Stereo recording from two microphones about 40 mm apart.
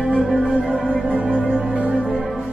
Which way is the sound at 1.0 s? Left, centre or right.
Right.